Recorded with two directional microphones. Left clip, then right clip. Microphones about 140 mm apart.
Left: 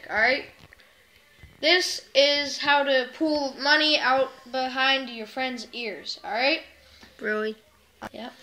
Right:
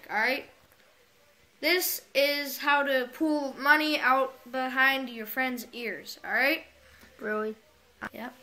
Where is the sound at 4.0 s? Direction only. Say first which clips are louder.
Left 2 dB; 20° right (ahead or behind).